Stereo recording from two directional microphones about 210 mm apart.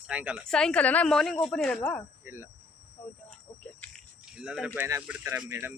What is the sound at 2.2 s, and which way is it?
Speech, 10° right (ahead or behind).